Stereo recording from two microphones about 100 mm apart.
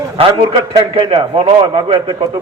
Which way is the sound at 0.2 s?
60° right (ahead or behind).